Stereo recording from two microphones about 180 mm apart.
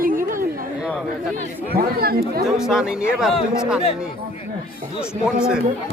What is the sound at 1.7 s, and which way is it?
Speech, 55° right (ahead or behind).